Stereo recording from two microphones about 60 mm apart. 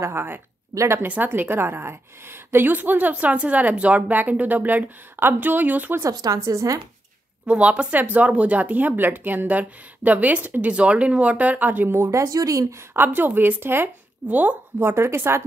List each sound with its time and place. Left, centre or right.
0.0 s a woman's voice: right
1.0 s a woman's voice: right
6.0 s a woman's voice: right
7.4 s a woman's voice: centre; by 12.1 s right
12.1 s speech: right
12.9 s a woman's voice: right
14.2 s a woman's voice: right
14.8 s a woman's voice: right